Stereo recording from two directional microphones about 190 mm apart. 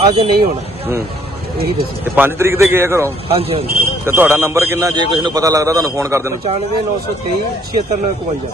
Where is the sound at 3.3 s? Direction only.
30° right (ahead or behind).